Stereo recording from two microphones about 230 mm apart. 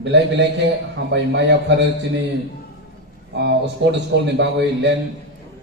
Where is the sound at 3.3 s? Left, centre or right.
Right.